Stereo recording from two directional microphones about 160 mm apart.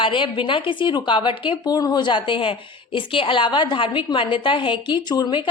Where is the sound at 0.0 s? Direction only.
30° left (ahead or behind).